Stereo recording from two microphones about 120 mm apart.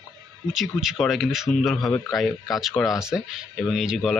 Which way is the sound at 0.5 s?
5° right (ahead or behind).